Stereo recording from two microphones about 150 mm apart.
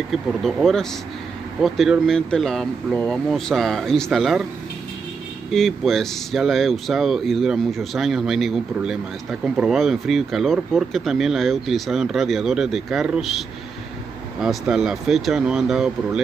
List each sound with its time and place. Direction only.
0.1 s speech: centre (ahead or behind)
5.5 s speech: centre (ahead or behind)
14.4 s speech: 5° right (ahead or behind)